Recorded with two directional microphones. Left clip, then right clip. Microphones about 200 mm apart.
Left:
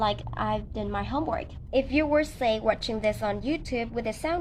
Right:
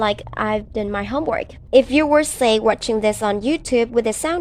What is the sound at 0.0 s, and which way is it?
A woman's voice, 50° right (ahead or behind).